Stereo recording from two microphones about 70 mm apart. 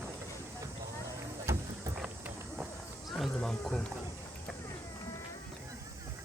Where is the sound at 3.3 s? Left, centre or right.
Centre.